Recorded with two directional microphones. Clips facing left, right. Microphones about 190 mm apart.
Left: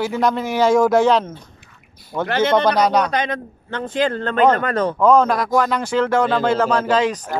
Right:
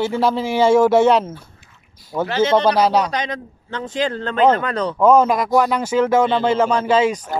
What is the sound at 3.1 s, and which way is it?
A man's voice, 55° left (ahead or behind).